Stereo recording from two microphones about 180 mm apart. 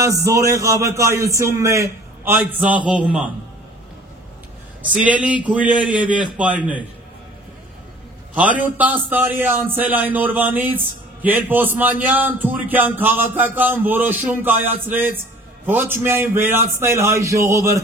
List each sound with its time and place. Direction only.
0.0 s a man's voice: 15° right (ahead or behind)
4.8 s a man's voice: 10° right (ahead or behind)
8.4 s a man's voice: 10° right (ahead or behind)